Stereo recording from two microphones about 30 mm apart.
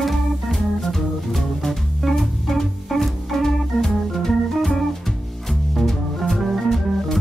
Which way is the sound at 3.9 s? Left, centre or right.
Centre.